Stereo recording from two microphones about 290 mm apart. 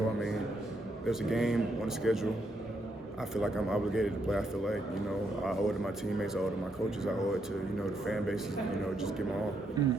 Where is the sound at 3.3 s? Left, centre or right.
Centre.